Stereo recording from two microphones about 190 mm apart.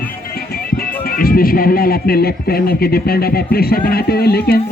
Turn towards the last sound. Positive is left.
turn(degrees=55)  # may be behind; listen again after turning